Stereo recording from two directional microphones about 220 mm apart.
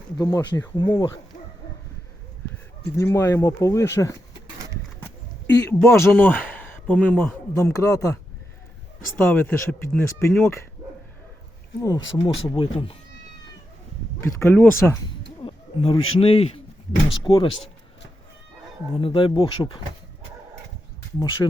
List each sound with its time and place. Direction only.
0.2 s speech: 15° left (ahead or behind)
3.0 s speech: 10° left (ahead or behind)
5.5 s speech: 15° left (ahead or behind)
11.8 s speech: 20° left (ahead or behind)
14.2 s speech: 10° left (ahead or behind)
15.4 s a man's voice: 25° left (ahead or behind)
18.9 s speech: 25° left (ahead or behind)
21.2 s speech: 15° left (ahead or behind)